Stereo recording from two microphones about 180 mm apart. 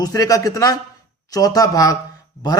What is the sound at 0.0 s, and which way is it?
Speech, 20° left (ahead or behind).